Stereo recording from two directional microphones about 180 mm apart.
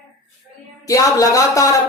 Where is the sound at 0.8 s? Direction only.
20° left (ahead or behind).